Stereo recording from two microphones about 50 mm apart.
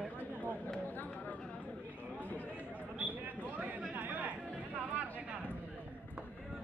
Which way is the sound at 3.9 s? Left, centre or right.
Right.